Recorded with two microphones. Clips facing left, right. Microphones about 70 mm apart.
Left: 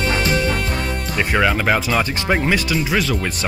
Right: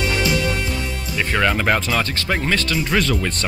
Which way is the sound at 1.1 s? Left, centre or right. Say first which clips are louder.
Left 1 dB; centre.